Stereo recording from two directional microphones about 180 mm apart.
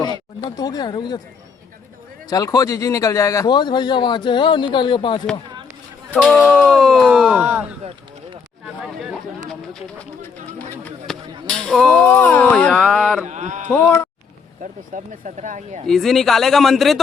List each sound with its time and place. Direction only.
0.5 s a man's voice: 20° left (ahead or behind)
2.3 s a man's voice: 20° left (ahead or behind)
6.1 s speech: 10° left (ahead or behind); by 7.6 s 10° right (ahead or behind)
10.6 s a sound: 10° left (ahead or behind)
11.7 s speech: centre (ahead or behind)
13.2 s a sound: 40° right (ahead or behind)
13.7 s speech: 10° left (ahead or behind)
14.6 s speech: 45° right (ahead or behind)
15.9 s speech: centre (ahead or behind)